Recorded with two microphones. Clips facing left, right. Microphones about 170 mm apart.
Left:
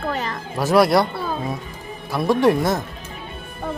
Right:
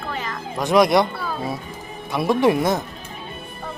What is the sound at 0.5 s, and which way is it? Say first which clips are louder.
Speech: even; 5° left (ahead or behind).